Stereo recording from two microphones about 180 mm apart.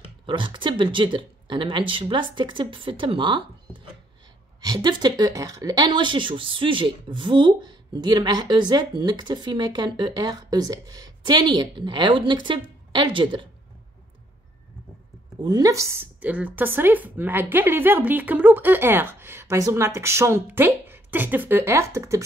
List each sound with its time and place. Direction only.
0.3 s speech: 25° right (ahead or behind)
4.6 s speech: 20° right (ahead or behind)
15.4 s speech: 20° right (ahead or behind)